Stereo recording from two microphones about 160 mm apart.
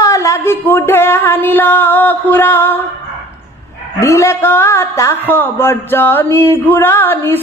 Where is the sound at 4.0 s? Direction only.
20° left (ahead or behind).